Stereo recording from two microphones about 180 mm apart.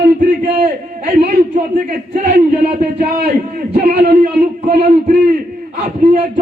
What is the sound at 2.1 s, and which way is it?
Speech, 50° right (ahead or behind).